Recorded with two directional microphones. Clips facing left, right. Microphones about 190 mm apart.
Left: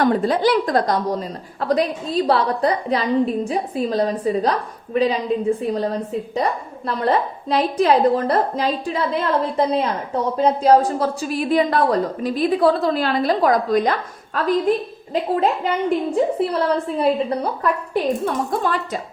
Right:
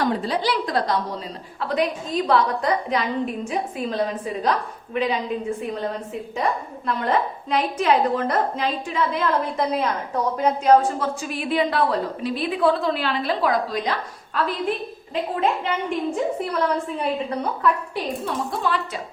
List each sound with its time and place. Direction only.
0.0 s a woman's voice: 50° left (ahead or behind)
1.6 s a woman's voice: 35° left (ahead or behind)